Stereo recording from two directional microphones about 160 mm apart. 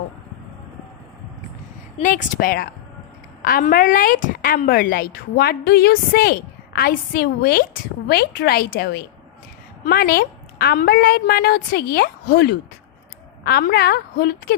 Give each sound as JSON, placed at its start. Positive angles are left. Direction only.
{"t": 2.0, "sound": "a woman's voice", "side_deg": 55}